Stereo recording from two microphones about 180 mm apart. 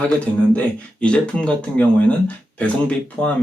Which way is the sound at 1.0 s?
5° left (ahead or behind).